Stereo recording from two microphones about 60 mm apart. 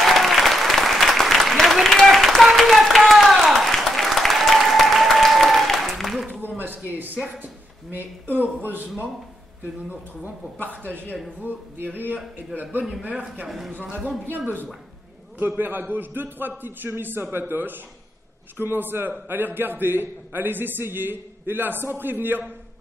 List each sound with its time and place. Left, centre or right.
0.0 s applause: centre
8.4 s a man's voice: right
11.4 s a man's voice: right